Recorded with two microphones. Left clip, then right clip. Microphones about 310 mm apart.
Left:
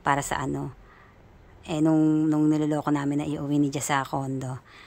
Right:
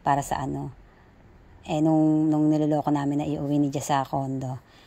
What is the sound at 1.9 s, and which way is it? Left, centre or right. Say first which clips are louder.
Mantra: right 1 dB; left.